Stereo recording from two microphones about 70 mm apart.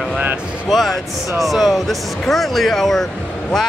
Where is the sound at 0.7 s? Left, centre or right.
Centre.